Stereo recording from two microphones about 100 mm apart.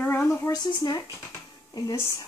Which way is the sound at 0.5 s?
45° left (ahead or behind).